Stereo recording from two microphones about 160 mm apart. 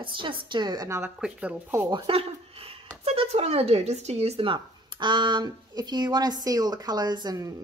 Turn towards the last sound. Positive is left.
turn(degrees=-25)  # may be behind; listen again after turning